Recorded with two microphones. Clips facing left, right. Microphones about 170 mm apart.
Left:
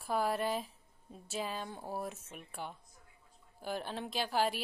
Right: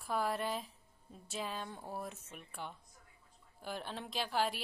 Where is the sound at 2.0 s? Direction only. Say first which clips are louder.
Left 3 dB; 5° left (ahead or behind).